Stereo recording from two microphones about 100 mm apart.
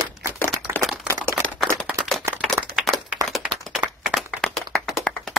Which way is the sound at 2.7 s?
Centre (ahead or behind).